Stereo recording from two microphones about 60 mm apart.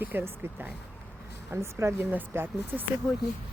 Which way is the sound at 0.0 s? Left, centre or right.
Right.